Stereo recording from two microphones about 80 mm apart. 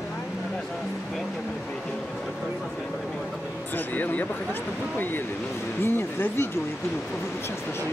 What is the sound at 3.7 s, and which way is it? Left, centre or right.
Speech, left.